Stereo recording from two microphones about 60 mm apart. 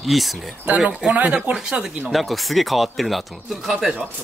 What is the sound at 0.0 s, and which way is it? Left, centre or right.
Speech, centre.